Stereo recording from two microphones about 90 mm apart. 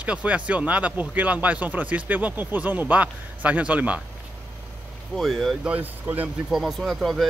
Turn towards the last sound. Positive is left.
turn(degrees=0)  # may be behind; listen again after turning